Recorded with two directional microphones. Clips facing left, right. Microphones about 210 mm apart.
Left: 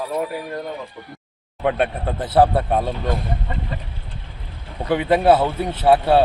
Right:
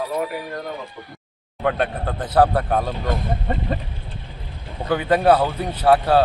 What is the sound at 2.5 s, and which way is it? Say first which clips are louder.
Speech: left 1 dB; 25° left (ahead or behind).